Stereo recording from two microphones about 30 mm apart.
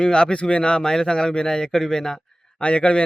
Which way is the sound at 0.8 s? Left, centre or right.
Left.